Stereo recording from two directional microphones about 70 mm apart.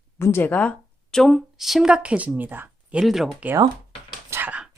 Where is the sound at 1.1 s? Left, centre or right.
Centre; by 2.7 s right.